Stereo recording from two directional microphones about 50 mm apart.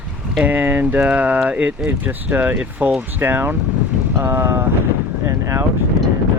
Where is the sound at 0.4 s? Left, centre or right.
Right.